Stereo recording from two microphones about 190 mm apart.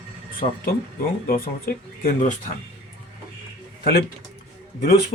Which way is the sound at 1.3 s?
50° left (ahead or behind).